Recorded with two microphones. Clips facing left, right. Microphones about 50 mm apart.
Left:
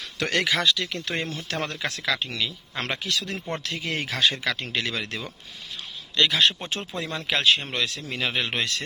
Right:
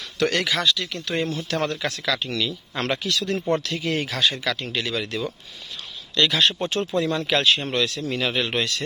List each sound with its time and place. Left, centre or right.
0.2 s speech: left
2.7 s speech: centre; by 5.3 s left
6.2 s speech: centre